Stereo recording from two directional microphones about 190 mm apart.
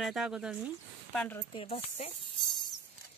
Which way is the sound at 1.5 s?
30° left (ahead or behind).